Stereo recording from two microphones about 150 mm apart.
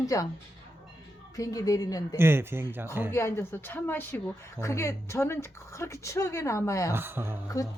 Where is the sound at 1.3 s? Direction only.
20° left (ahead or behind).